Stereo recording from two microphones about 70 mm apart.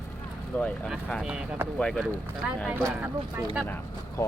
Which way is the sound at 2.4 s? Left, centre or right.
Centre.